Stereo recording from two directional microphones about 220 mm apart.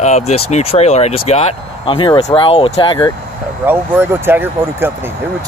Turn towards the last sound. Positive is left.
turn(degrees=-10)  # may be behind; listen again after turning